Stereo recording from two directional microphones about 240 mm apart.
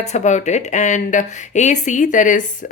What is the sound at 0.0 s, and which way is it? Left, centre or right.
Speech, left.